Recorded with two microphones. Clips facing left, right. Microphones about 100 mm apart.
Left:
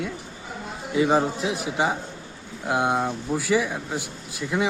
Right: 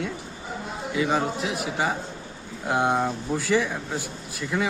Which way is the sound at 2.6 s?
5° left (ahead or behind).